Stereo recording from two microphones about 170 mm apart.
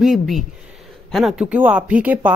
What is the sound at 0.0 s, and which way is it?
Speech, centre (ahead or behind).